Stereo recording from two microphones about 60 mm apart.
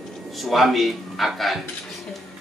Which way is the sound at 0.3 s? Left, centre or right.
Centre.